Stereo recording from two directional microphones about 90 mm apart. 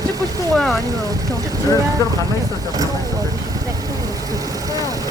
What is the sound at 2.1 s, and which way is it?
Vehicle, 40° right (ahead or behind).